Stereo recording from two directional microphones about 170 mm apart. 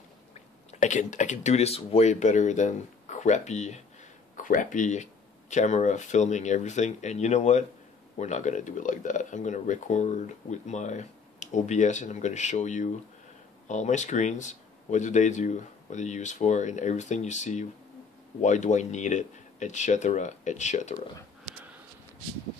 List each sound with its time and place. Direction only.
0.3 s speech: 45° left (ahead or behind)